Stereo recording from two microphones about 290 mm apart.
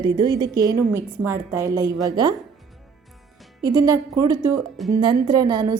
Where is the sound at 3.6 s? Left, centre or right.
Centre.